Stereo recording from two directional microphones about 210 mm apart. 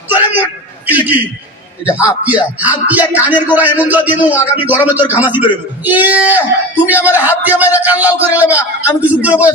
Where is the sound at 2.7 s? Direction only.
10° right (ahead or behind).